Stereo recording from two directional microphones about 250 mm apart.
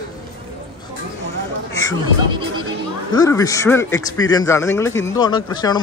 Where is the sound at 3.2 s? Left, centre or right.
Centre.